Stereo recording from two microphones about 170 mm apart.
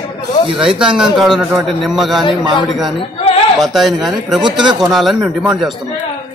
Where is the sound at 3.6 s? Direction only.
Centre (ahead or behind).